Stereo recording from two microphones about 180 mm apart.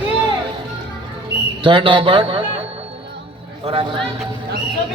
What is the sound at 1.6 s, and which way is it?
Speech, 30° right (ahead or behind).